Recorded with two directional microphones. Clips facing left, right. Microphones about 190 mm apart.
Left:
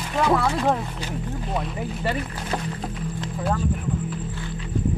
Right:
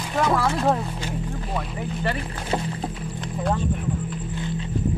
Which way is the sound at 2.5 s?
25° right (ahead or behind).